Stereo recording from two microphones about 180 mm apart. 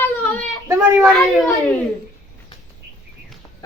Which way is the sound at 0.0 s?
10° left (ahead or behind).